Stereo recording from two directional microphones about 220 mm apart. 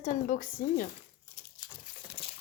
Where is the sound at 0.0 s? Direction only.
35° left (ahead or behind).